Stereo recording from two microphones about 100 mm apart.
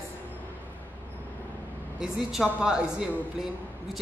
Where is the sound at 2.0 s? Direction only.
5° right (ahead or behind).